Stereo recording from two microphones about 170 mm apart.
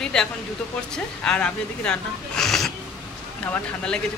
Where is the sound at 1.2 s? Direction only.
5° left (ahead or behind).